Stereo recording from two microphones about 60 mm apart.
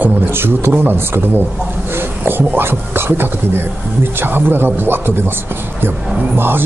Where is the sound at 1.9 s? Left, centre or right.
Right.